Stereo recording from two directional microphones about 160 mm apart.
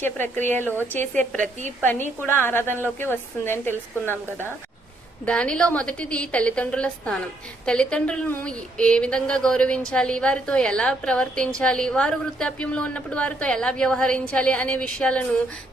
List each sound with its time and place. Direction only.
0.0 s a woman's voice: 15° left (ahead or behind)